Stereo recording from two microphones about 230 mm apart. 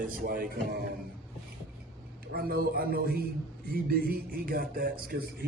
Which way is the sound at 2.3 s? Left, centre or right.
Right.